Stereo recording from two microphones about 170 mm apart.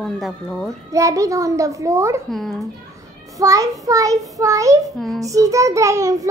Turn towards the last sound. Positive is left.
turn(degrees=-20)  # may be behind; listen again after turning